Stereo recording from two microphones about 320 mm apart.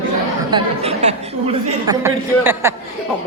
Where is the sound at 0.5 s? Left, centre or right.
Centre.